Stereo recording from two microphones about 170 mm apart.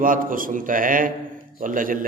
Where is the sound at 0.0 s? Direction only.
55° right (ahead or behind).